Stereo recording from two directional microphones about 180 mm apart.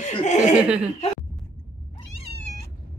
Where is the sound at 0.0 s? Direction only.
40° left (ahead or behind).